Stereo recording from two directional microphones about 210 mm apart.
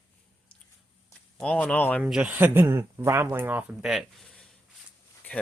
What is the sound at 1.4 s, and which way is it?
Speech, 5° left (ahead or behind).